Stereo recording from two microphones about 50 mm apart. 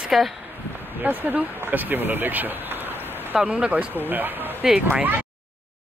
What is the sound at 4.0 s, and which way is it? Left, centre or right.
Speech, right.